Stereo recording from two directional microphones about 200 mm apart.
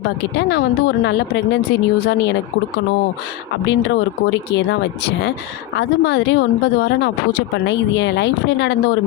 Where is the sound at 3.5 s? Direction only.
60° left (ahead or behind).